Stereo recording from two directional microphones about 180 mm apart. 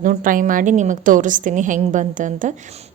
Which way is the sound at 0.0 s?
45° right (ahead or behind).